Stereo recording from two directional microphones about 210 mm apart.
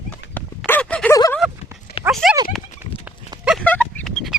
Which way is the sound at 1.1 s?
15° left (ahead or behind).